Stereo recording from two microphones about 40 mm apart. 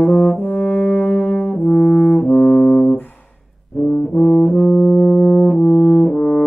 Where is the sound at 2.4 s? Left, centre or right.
Centre.